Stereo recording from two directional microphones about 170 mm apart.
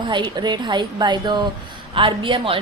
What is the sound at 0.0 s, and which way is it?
A woman's voice, 25° right (ahead or behind).